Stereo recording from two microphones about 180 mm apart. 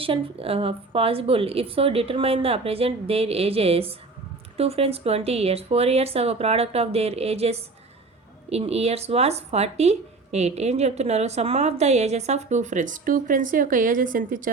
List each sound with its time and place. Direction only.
0.0 s speech: 30° right (ahead or behind); by 14.5 s 50° right (ahead or behind)